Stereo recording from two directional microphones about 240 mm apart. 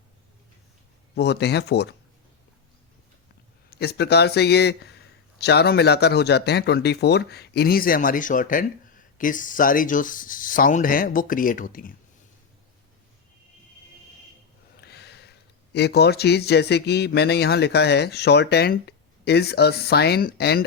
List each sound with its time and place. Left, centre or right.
1.1 s speech: left
3.7 s speech: left
14.8 s a sound: left
15.7 s speech: left